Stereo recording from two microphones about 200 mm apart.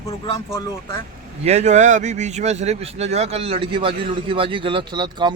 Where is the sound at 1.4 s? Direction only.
35° right (ahead or behind).